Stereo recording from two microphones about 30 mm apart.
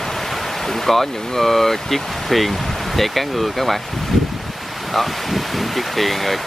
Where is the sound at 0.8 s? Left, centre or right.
Centre.